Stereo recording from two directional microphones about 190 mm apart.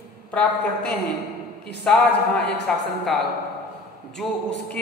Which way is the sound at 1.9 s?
5° left (ahead or behind).